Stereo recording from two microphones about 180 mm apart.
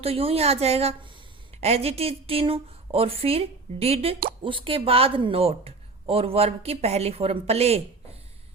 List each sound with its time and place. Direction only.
0.0 s speech: 35° right (ahead or behind)